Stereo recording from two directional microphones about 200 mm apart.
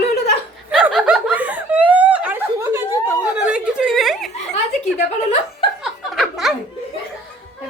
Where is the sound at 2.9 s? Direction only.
15° left (ahead or behind).